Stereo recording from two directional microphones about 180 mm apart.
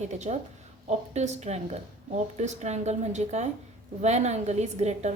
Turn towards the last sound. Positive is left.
turn(degrees=-40)  # may be behind; listen again after turning